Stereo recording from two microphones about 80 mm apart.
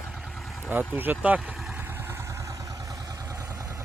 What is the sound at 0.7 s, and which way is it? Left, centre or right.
Speech, right.